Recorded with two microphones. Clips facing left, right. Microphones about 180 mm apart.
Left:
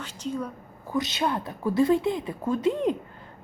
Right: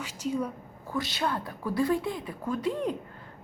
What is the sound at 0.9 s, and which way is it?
Speech, 20° left (ahead or behind).